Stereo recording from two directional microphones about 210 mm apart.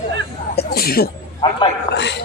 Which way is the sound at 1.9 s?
55° left (ahead or behind).